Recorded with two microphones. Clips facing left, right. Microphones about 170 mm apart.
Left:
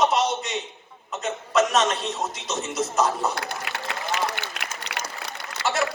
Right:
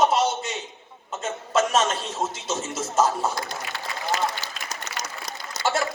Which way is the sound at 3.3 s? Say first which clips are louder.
Left 1 dB; 65° left (ahead or behind).